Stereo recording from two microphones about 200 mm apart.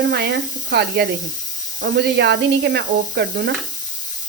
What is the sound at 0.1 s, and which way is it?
Speech, 55° right (ahead or behind).